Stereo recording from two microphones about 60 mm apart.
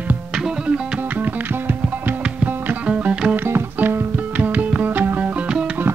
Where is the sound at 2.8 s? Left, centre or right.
Right.